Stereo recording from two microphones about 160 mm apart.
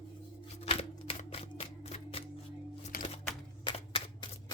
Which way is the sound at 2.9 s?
65° left (ahead or behind).